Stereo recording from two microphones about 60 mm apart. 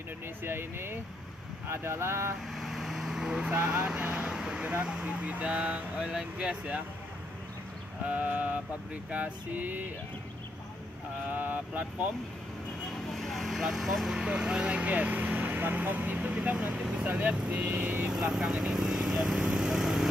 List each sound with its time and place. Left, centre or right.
0.4 s speech: right
2.5 s vehicle: centre
3.4 s speech: right
8.1 s speech: right
11.2 s speech: right
12.9 s speech: centre; by 18.0 s right
18.0 s vehicle: centre